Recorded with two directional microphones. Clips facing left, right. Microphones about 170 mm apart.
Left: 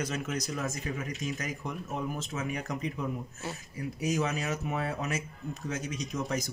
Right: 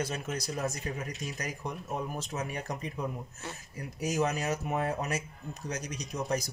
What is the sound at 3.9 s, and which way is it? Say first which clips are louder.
Speech: right 1 dB; 40° right (ahead or behind).